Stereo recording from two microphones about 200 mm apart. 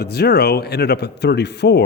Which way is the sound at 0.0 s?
55° left (ahead or behind).